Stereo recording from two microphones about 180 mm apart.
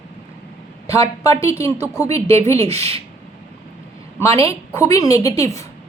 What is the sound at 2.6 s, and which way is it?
Speech, 35° right (ahead or behind).